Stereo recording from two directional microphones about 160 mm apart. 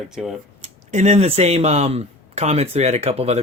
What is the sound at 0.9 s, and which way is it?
Speech, 45° right (ahead or behind).